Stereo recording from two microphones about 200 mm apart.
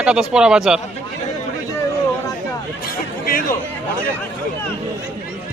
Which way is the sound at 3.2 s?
45° left (ahead or behind).